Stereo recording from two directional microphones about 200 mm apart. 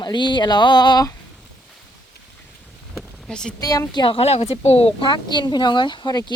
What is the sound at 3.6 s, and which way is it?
A woman's voice, 15° left (ahead or behind).